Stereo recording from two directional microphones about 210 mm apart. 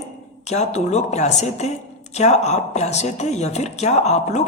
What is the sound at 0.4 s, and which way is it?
A woman's voice, 30° left (ahead or behind).